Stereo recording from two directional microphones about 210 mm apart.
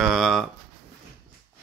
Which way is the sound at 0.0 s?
Centre (ahead or behind).